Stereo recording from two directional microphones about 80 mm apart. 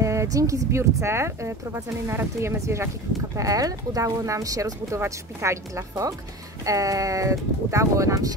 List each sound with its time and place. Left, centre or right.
0.0 s speech: right